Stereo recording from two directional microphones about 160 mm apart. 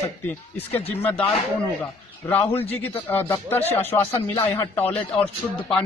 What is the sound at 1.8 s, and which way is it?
A man's voice, 10° left (ahead or behind).